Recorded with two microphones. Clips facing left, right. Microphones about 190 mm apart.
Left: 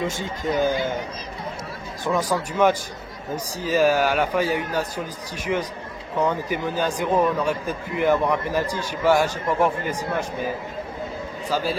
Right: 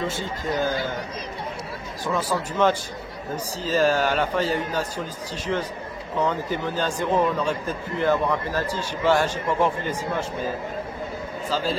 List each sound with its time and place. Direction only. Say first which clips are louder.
0.0 s a man's voice: left 2 dB; 15° left (ahead or behind)
2.0 s a man's voice: left 2 dB; 15° left (ahead or behind)